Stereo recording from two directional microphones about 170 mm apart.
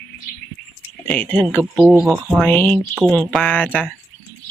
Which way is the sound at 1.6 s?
5° right (ahead or behind).